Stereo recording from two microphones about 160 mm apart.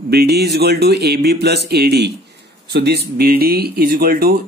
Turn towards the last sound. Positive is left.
turn(degrees=-65)  # may be behind; listen again after turning